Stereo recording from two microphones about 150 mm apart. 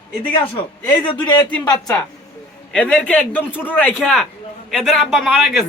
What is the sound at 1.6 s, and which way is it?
Speech, 25° left (ahead or behind).